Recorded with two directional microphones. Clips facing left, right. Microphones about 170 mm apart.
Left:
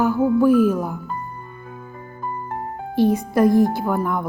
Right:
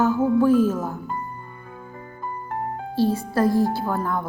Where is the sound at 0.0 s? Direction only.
10° left (ahead or behind).